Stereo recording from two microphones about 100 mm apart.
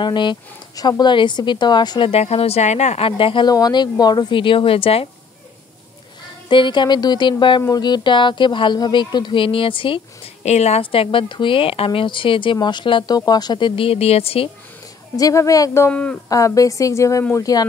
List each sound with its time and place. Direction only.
0.0 s speech: 50° left (ahead or behind)
2.0 s speech: 85° left; by 3.4 s 65° left (ahead or behind)
3.4 s a woman's voice: 40° left (ahead or behind); by 5.0 s 70° left (ahead or behind)
6.5 s speech: 55° left (ahead or behind); by 14.5 s 75° left (ahead or behind)
15.1 s a woman's voice: 35° left (ahead or behind)
15.9 s speech: 15° left (ahead or behind)
16.3 s a woman's voice: 35° left (ahead or behind)